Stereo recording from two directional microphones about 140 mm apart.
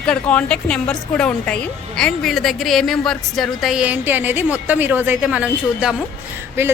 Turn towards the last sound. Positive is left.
turn(degrees=-20)  # may be behind; listen again after turning